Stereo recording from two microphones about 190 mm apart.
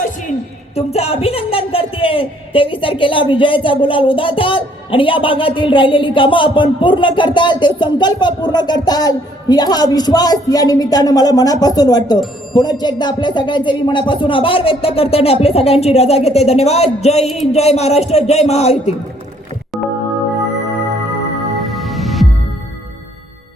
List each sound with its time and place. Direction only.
0.0 s a sound: 40° left (ahead or behind)
0.8 s speech: 35° left (ahead or behind)
17.2 s a sound: centre (ahead or behind)
17.5 s speech: 35° left (ahead or behind)
19.7 s music: centre (ahead or behind)
21.6 s music: centre (ahead or behind)